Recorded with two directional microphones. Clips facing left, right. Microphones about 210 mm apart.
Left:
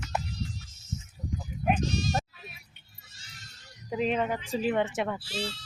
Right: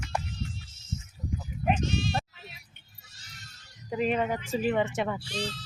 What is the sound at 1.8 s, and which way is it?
Speech, 40° left (ahead or behind).